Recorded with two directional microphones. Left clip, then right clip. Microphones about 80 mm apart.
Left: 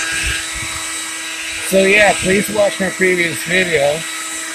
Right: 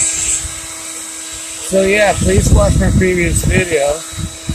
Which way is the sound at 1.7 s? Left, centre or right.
Centre.